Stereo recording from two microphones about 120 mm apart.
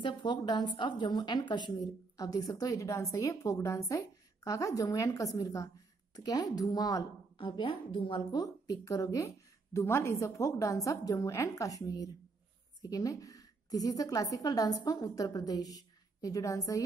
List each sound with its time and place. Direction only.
0.0 s a woman's voice: 40° left (ahead or behind)
7.3 s a woman's voice: 45° left (ahead or behind); by 16.8 s 30° left (ahead or behind)